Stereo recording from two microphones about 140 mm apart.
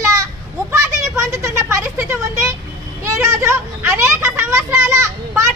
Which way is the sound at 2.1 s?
20° right (ahead or behind).